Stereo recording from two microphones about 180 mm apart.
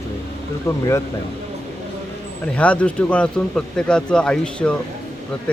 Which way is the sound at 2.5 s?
5° left (ahead or behind).